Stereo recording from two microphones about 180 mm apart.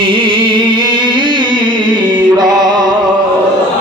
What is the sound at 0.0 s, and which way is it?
Music, 30° right (ahead or behind).